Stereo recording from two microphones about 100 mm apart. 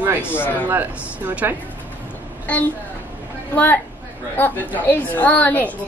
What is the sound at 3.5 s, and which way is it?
A woman's voice, 20° left (ahead or behind).